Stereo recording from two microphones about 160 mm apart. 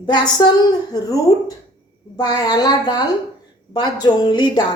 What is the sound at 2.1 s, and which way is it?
Speech, 25° left (ahead or behind).